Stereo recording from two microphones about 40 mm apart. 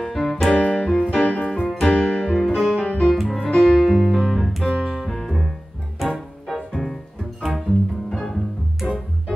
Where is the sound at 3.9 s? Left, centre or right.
Centre.